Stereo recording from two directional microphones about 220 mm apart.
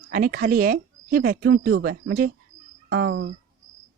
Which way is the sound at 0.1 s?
40° right (ahead or behind).